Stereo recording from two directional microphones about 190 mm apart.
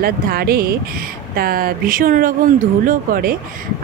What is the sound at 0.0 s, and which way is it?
Speech, 50° right (ahead or behind).